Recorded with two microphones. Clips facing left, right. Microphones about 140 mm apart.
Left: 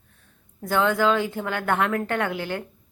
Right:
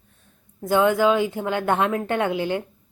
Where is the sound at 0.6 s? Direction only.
15° right (ahead or behind).